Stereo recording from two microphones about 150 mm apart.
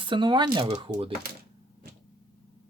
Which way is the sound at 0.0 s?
30° right (ahead or behind).